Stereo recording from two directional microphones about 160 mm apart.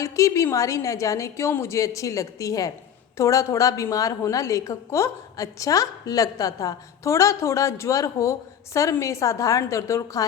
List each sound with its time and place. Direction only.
0.0 s a woman's voice: 20° left (ahead or behind)